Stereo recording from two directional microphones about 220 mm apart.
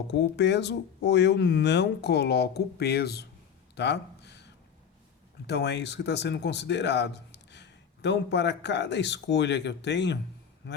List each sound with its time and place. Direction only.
0.1 s speech: 50° left (ahead or behind)
3.8 s a sound: 50° left (ahead or behind)
5.5 s a man's voice: 50° left (ahead or behind)